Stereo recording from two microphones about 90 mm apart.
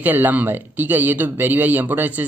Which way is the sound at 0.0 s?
20° right (ahead or behind).